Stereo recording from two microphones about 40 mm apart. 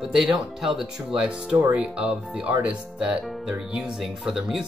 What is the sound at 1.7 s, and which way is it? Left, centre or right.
Speech, right.